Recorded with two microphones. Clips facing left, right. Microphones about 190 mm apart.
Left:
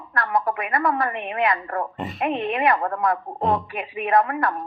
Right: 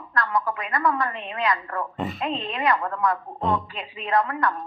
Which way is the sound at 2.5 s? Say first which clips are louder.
Left 2 dB; 25° left (ahead or behind).